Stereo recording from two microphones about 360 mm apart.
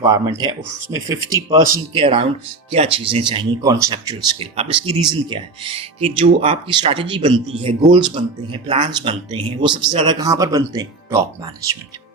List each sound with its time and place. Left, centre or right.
0.0 s speech: centre